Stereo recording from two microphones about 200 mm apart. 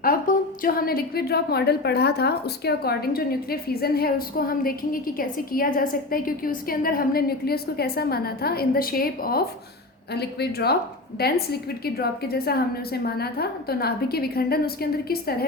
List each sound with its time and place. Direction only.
0.0 s a woman's voice: 45° left (ahead or behind)